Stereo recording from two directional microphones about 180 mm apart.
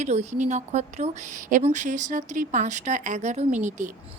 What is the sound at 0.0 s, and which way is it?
A woman's voice, 40° right (ahead or behind).